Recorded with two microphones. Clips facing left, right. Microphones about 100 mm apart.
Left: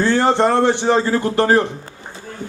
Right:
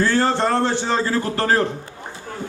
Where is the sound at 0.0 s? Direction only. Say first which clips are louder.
Left 3 dB; 20° left (ahead or behind).